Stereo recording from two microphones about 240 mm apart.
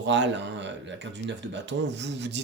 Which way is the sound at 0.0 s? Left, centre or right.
Right.